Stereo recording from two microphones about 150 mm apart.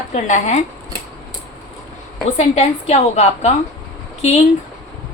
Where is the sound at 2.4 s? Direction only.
45° left (ahead or behind).